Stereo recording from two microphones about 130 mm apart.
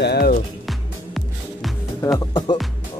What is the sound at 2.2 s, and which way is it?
Speech, 30° left (ahead or behind).